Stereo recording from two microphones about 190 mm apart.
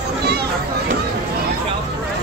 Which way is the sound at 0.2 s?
60° right (ahead or behind).